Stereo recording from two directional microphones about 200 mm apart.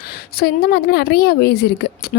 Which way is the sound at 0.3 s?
50° left (ahead or behind).